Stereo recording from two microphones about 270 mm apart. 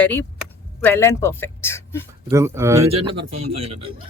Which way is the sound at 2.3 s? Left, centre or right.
Centre.